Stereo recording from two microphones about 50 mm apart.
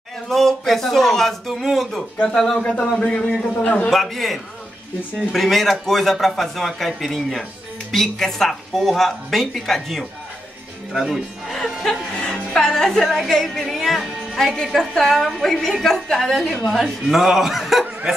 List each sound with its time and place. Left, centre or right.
0.3 s a man's voice: centre; by 3.9 s left
3.9 s a woman's voice: centre